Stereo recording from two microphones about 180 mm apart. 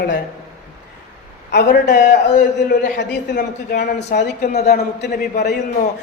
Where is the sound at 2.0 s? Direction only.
45° left (ahead or behind).